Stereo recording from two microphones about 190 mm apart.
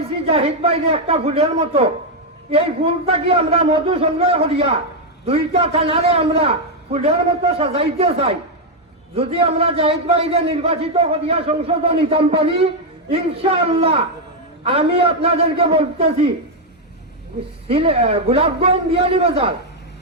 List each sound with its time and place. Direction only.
0.0 s a man's voice: 30° right (ahead or behind)
17.7 s a man's voice: 30° right (ahead or behind)